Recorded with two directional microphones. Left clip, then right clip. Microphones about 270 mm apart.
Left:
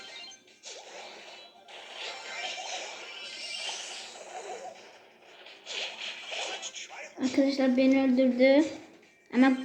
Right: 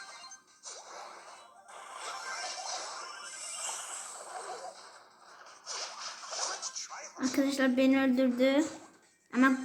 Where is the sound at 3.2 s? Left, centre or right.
Centre.